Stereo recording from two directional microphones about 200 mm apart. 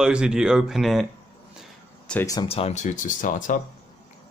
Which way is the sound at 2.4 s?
30° left (ahead or behind).